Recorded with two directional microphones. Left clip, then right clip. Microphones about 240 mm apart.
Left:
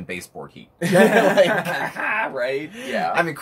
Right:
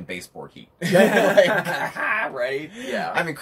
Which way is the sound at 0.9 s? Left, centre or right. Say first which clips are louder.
Left 1 dB; centre.